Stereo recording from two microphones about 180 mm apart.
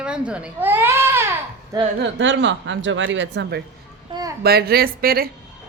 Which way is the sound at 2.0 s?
85° right.